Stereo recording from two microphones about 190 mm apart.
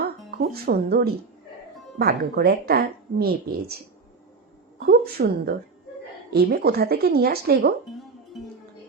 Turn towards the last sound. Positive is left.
turn(degrees=-55)  # may be behind; listen again after turning